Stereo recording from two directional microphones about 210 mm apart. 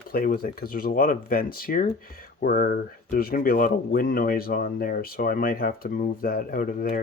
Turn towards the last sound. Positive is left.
turn(degrees=40)  # may be behind; listen again after turning